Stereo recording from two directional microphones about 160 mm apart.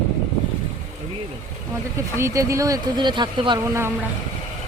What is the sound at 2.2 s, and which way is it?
Speech, 20° right (ahead or behind).